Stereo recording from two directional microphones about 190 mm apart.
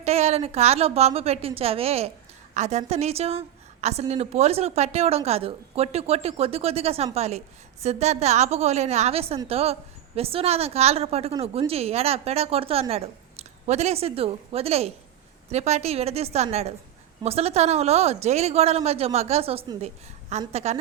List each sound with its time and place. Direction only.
0.0 s a woman's voice: 35° right (ahead or behind)